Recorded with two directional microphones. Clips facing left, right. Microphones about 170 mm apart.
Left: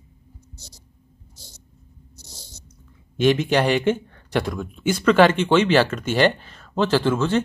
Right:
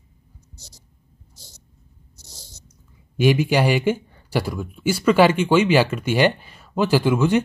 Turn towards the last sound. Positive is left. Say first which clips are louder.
# right 2 dB
turn(degrees=-10)  # may be behind; listen again after turning